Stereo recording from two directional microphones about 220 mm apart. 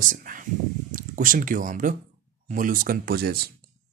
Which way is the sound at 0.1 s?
40° right (ahead or behind).